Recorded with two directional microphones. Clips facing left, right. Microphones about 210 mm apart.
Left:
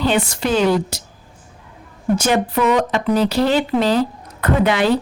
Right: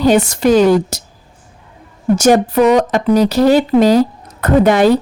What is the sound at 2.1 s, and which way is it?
A woman's voice, 40° right (ahead or behind).